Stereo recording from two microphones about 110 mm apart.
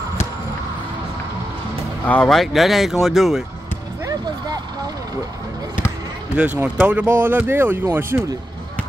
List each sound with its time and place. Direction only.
2.0 s speech: 5° left (ahead or behind)
6.3 s speech: 10° right (ahead or behind)